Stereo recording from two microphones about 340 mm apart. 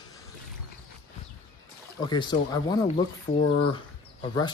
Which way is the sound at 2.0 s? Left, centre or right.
Centre.